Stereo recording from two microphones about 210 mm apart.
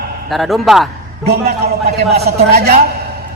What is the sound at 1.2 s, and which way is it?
A woman's voice, 50° right (ahead or behind).